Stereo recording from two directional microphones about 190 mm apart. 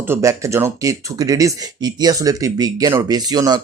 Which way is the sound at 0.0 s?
15° right (ahead or behind).